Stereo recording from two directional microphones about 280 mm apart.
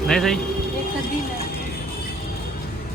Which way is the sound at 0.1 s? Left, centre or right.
Centre.